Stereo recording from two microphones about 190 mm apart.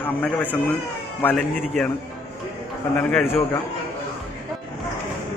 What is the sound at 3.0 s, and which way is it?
Speech, 5° left (ahead or behind).